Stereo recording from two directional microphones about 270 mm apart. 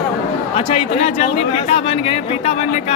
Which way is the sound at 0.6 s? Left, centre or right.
Left.